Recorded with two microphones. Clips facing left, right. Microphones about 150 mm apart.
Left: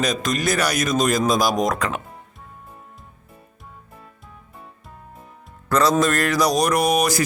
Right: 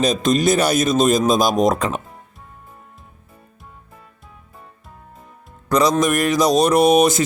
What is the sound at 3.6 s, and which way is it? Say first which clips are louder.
Music: left 1 dB; centre (ahead or behind).